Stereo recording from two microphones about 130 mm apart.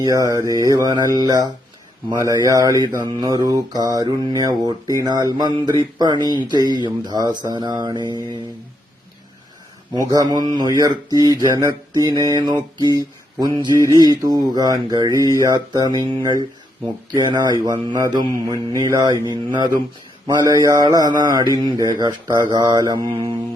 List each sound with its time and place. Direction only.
0.0 s speech: 25° right (ahead or behind)
9.9 s speech: 30° right (ahead or behind)